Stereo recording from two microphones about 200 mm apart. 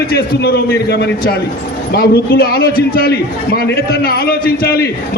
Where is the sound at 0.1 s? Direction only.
50° left (ahead or behind).